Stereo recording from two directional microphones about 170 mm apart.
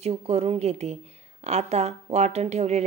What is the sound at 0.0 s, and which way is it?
Speech, 35° right (ahead or behind).